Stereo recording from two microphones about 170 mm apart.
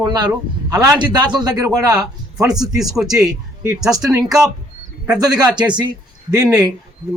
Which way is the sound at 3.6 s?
20° right (ahead or behind).